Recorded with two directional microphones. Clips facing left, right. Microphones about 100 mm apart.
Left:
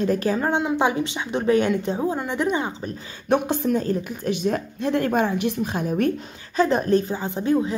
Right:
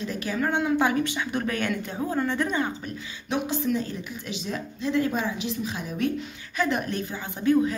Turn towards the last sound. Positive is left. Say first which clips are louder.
# left 1 dB
turn(degrees=25)  # may be behind; listen again after turning